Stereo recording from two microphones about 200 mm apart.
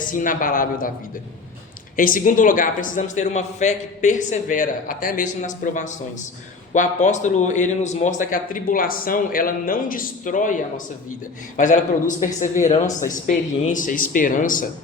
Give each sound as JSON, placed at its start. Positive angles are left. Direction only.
{"t": 0.0, "sound": "a woman's voice", "side_deg": 45}
{"t": 2.0, "sound": "a woman's voice", "side_deg": 45}